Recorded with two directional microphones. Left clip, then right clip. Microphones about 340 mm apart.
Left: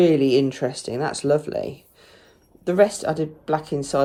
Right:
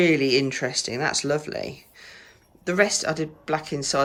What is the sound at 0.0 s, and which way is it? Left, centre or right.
Speech, centre.